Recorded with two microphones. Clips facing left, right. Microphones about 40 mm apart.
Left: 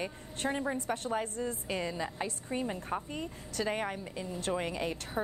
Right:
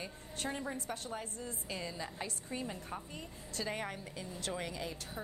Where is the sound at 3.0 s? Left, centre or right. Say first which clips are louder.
Left 8 dB; left.